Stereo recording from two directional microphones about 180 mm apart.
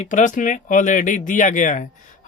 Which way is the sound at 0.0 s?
45° left (ahead or behind).